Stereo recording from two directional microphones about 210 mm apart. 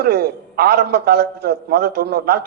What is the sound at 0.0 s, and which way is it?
A man's voice, 50° right (ahead or behind).